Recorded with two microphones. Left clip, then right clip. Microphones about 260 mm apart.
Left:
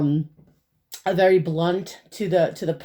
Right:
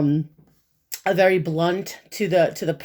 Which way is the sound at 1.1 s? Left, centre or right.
Right.